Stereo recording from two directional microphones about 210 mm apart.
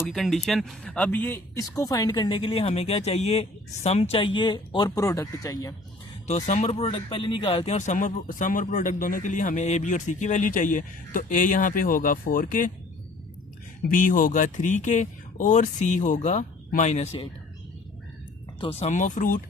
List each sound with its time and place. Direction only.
0.0 s speech: centre (ahead or behind)
6.2 s speech: 30° left (ahead or behind)
13.8 s speech: 40° left (ahead or behind)
18.6 s speech: 30° left (ahead or behind)